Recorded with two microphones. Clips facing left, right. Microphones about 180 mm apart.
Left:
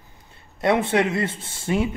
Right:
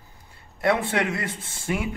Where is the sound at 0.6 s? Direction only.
20° left (ahead or behind).